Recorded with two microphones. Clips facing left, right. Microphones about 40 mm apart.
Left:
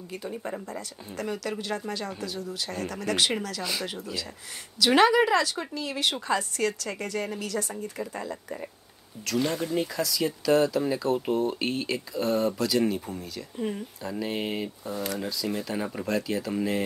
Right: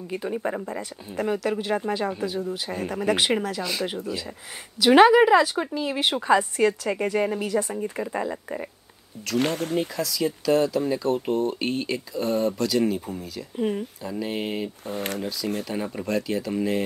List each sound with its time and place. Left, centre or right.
0.1 s speech: right
4.7 s speech: centre
9.4 s speech: right
9.9 s speech: centre
13.6 s speech: centre
14.0 s speech: centre
14.9 s speech: right
15.7 s speech: centre